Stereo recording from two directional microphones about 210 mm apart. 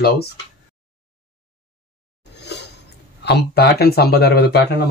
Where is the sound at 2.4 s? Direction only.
55° left (ahead or behind).